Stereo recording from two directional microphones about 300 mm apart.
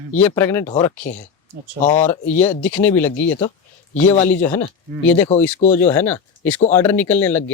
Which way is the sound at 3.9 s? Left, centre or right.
Centre.